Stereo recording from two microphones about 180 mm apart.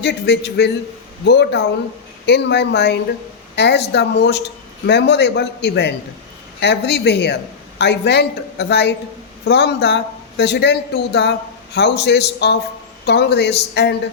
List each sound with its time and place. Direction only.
0.0 s speech: 70° left (ahead or behind)